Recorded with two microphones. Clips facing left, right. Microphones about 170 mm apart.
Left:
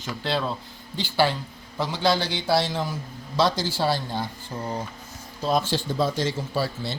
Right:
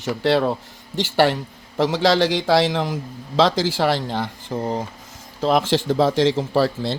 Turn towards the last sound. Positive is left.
turn(degrees=-90)